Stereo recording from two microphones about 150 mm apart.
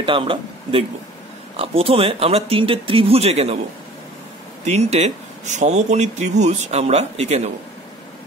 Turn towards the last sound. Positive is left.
turn(degrees=-45)  # may be behind; listen again after turning